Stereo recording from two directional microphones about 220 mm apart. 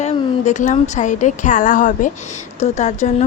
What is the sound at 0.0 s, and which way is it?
A woman's voice, 30° left (ahead or behind).